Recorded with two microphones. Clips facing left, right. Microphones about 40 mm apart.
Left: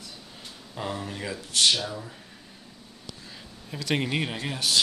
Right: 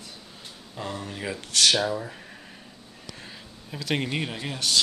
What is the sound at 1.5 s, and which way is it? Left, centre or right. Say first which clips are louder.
Speech: right 1 dB; right.